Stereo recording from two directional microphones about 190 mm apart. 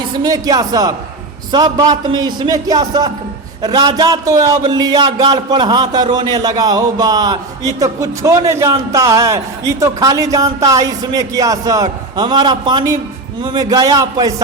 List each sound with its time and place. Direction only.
0.2 s a man's voice: 20° right (ahead or behind)